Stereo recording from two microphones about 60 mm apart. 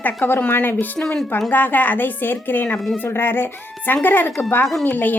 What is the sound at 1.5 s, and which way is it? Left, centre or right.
A child's voice, left.